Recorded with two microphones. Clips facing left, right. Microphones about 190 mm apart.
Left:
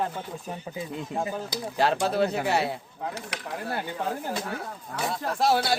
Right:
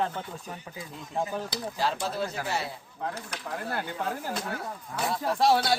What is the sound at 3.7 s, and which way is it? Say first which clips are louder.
Speech: left 2 dB; 20° left (ahead or behind).